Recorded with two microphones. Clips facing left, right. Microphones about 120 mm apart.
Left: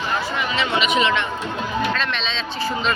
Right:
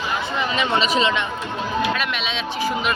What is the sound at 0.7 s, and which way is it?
Speech, 30° right (ahead or behind).